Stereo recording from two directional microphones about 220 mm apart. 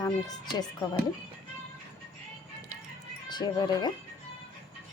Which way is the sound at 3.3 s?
20° left (ahead or behind).